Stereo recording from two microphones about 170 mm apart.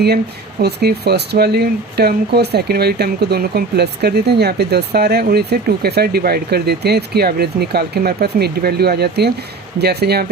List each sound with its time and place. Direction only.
0.6 s speech: 70° right (ahead or behind)